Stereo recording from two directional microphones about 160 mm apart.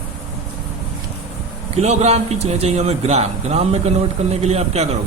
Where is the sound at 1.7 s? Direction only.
45° right (ahead or behind).